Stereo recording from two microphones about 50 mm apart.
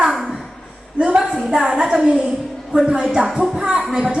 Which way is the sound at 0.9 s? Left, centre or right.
Right.